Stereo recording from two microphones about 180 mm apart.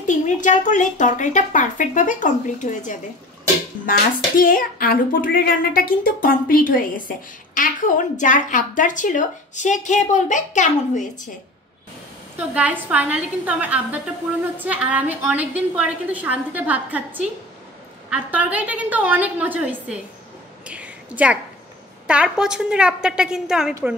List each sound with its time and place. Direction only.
0.0 s speech: 45° left (ahead or behind)
4.4 s speech: 50° left (ahead or behind)
12.4 s a woman's voice: 10° right (ahead or behind)
20.6 s a sound: 5° right (ahead or behind)
22.0 s a woman's voice: 5° right (ahead or behind)